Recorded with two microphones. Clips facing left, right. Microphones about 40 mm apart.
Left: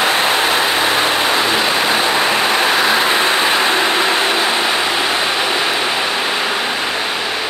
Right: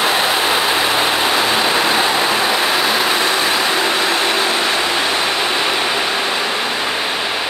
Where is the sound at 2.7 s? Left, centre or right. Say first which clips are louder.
Left 2 dB; left.